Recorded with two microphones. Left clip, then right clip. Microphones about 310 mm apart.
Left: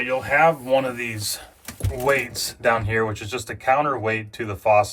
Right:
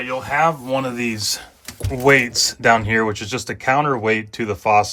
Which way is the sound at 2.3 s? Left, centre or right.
Right.